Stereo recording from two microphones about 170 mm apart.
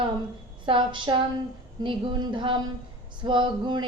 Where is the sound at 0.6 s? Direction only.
30° right (ahead or behind).